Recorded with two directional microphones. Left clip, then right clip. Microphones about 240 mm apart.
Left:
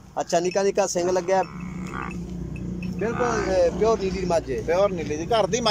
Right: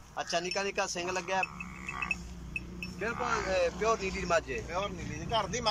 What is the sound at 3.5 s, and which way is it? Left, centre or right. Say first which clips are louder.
Speech: left 9 dB; left.